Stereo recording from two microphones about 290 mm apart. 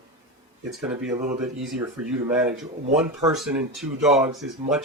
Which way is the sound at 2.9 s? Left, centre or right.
Centre.